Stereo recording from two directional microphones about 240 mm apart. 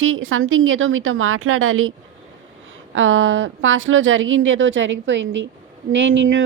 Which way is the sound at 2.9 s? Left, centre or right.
Right.